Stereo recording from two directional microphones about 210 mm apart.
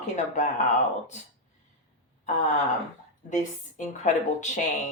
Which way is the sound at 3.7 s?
35° left (ahead or behind).